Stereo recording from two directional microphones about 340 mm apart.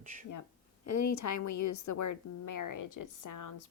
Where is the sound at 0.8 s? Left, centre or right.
Left.